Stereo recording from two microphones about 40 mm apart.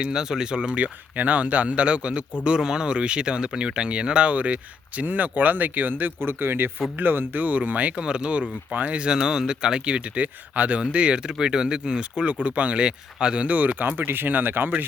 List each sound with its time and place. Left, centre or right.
0.1 s speech: centre
0.8 s speech: right
2.4 s speech: centre; by 6.1 s right
6.1 s speech: right
6.9 s speech: right
7.9 s speech: right
9.1 s speech: centre
10.5 s speech: right
12.2 s speech: right
13.4 s speech: right
13.9 s speech: right